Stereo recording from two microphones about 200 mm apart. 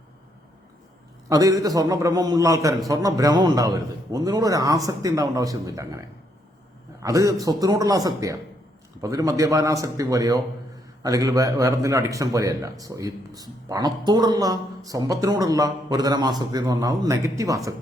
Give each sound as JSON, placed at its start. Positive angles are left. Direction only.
{"t": 1.3, "sound": "speech", "side_deg": -15}